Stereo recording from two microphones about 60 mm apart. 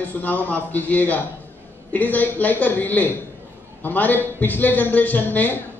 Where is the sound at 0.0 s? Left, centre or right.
Left.